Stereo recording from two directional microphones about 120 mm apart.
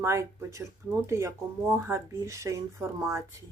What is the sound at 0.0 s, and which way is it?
Speech, 25° right (ahead or behind).